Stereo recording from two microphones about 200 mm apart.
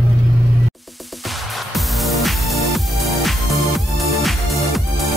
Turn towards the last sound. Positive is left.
turn(degrees=0)  # may be behind; listen again after turning